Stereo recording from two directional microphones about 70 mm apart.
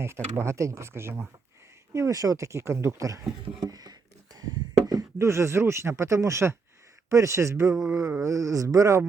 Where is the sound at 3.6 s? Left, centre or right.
Right.